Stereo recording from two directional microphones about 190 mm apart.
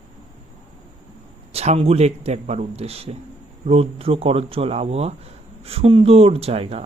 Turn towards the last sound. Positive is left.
turn(degrees=-30)  # may be behind; listen again after turning